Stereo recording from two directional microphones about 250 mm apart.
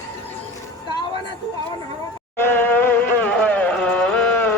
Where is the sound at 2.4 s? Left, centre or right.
Centre.